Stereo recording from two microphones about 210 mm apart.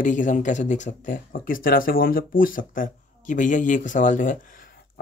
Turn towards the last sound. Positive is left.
turn(degrees=40)  # may be behind; listen again after turning